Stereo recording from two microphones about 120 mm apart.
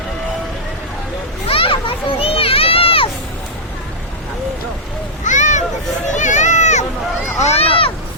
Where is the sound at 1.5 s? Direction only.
50° left (ahead or behind).